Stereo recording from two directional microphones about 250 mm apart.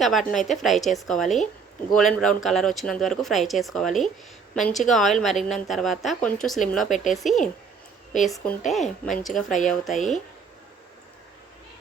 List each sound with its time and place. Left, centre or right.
0.0 s speech: centre
9.5 s speech: left